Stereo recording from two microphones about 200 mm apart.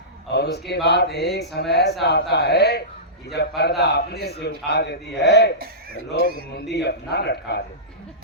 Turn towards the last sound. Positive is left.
turn(degrees=55)  # may be behind; listen again after turning